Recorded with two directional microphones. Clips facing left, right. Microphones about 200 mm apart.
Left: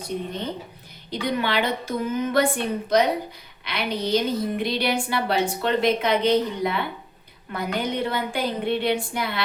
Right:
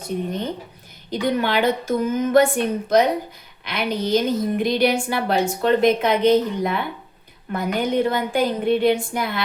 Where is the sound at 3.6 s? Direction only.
45° right (ahead or behind).